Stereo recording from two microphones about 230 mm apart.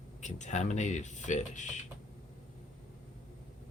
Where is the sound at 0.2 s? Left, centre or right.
Left.